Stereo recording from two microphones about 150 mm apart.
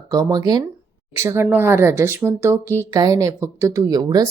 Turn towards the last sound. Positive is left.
turn(degrees=-25)  # may be behind; listen again after turning